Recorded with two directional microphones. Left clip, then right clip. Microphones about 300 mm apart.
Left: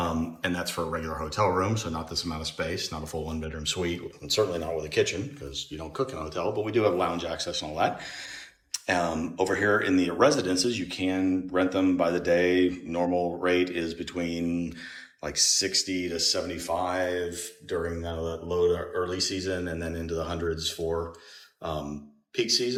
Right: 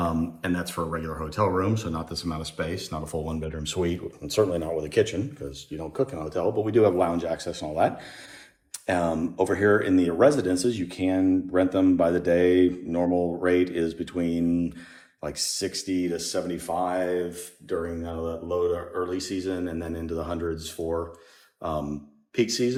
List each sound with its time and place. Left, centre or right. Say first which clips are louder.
0.0 s speech: right 1 dB; centre